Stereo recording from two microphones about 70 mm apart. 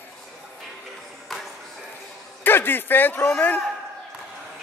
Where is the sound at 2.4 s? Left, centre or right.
Left.